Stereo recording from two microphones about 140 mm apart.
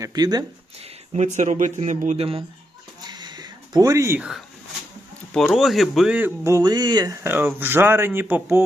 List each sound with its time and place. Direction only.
0.0 s speech: 30° right (ahead or behind)
1.1 s speech: 60° right (ahead or behind)
3.1 s a sound: 30° right (ahead or behind)
5.3 s speech: centre (ahead or behind)
6.1 s speech: 20° right (ahead or behind)
7.3 s speech: 15° right (ahead or behind)